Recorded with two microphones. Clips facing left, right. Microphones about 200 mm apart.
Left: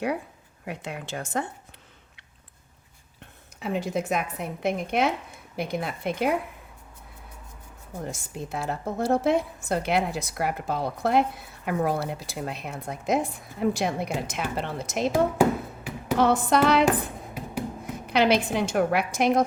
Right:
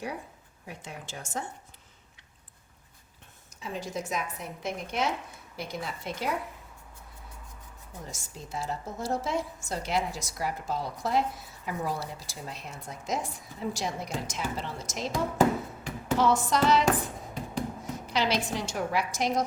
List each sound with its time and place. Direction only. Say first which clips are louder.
0.6 s a woman's voice: left 8 dB; 65° left (ahead or behind)
3.6 s a woman's voice: left 7 dB; 60° left (ahead or behind)
8.0 s a woman's voice: left 9 dB; 55° left (ahead or behind)
15.4 s a sound: left 2 dB; 10° left (ahead or behind)
16.1 s a woman's voice: left 4 dB; 60° left (ahead or behind)
18.0 s a woman's voice: left 7 dB; 60° left (ahead or behind)